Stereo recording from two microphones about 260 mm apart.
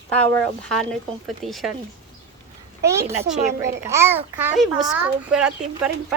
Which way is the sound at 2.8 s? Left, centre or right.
Centre.